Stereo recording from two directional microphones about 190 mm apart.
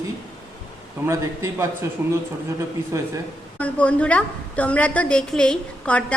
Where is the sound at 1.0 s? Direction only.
15° right (ahead or behind).